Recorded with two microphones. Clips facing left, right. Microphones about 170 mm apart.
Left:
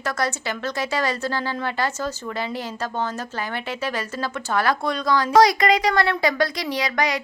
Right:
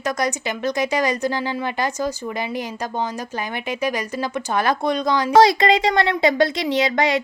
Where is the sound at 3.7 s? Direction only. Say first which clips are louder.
Right 4 dB; 15° right (ahead or behind).